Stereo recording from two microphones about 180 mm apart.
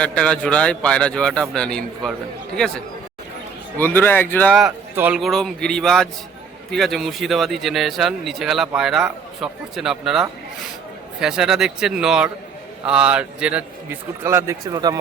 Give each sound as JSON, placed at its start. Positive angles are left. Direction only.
{"t": 0.0, "sound": "speech", "side_deg": 5}
{"t": 4.9, "sound": "a man's voice", "side_deg": -5}